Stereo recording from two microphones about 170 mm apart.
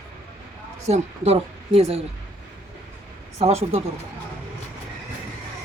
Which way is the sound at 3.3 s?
35° right (ahead or behind).